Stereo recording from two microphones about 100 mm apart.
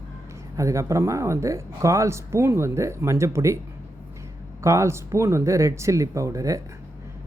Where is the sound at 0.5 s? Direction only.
30° right (ahead or behind).